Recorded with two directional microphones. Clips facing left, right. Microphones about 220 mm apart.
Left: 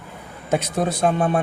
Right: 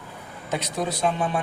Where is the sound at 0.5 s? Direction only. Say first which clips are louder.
Left 6 dB; 50° left (ahead or behind).